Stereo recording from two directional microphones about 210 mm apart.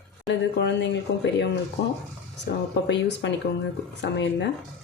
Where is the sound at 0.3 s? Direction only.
55° left (ahead or behind).